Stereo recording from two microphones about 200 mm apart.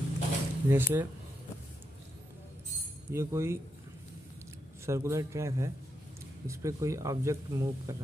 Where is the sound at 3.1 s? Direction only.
15° right (ahead or behind).